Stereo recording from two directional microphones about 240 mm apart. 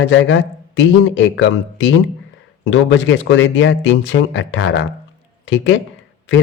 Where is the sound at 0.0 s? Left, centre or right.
Left.